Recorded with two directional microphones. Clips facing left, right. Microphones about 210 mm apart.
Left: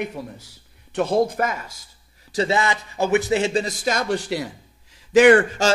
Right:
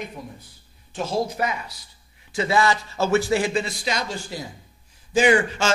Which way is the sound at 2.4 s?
20° left (ahead or behind).